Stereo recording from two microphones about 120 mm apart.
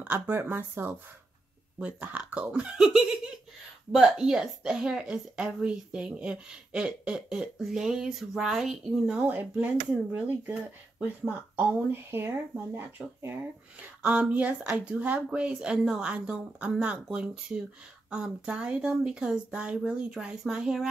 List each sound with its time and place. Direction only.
0.0 s a woman's voice: 15° right (ahead or behind)